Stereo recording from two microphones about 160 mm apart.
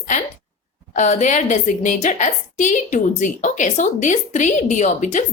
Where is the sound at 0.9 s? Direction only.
50° left (ahead or behind).